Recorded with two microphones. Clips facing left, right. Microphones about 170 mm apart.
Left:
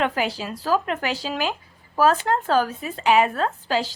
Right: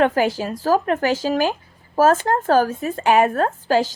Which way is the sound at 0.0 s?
45° right (ahead or behind).